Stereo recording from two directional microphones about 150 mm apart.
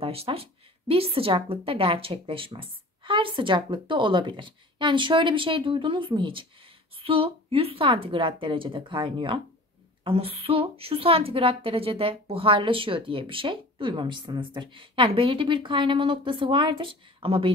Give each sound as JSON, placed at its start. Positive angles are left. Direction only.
{"t": 0.0, "sound": "a woman's voice", "side_deg": -40}